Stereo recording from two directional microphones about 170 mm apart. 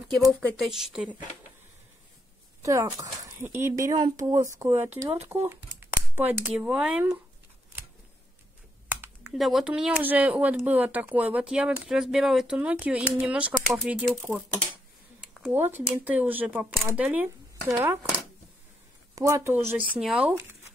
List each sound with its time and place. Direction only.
0.5 s speech: centre (ahead or behind)
2.6 s speech: 20° right (ahead or behind)
9.0 s speech: centre (ahead or behind)
15.5 s speech: 10° right (ahead or behind)
19.9 s speech: 5° right (ahead or behind)